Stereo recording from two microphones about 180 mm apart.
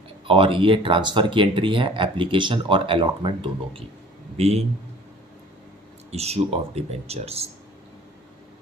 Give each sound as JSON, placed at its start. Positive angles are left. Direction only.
{"t": 0.3, "sound": "a man's voice", "side_deg": -30}
{"t": 6.1, "sound": "speech", "side_deg": -35}